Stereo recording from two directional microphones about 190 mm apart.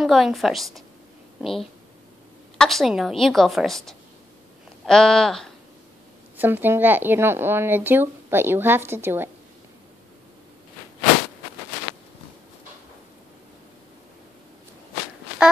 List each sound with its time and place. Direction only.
0.0 s a woman's voice: centre (ahead or behind)
6.3 s speech: 10° right (ahead or behind)